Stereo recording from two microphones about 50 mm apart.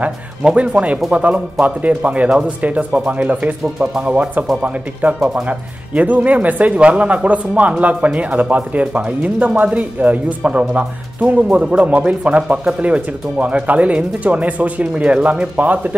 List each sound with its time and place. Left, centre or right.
0.0 s speech: right
4.1 s speech: right